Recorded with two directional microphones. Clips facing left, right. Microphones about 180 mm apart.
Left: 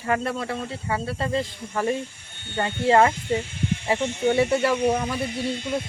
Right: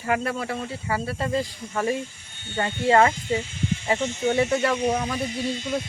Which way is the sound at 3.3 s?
55° left (ahead or behind).